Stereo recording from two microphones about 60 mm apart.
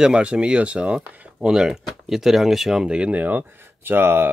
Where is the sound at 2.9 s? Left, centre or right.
Right.